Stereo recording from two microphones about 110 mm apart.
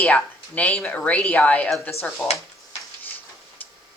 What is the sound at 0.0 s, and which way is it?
Speech, 15° left (ahead or behind).